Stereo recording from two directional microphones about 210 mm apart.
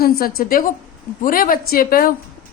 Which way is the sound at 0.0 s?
45° left (ahead or behind).